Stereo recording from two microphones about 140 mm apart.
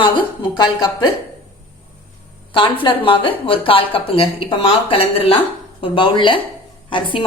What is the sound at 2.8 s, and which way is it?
A woman's voice, 40° left (ahead or behind).